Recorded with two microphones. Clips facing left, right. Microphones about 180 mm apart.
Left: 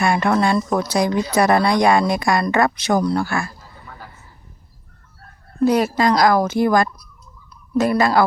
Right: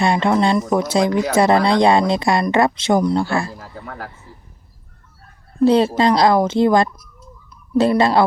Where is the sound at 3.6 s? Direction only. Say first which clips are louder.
Right 8 dB; 85° right.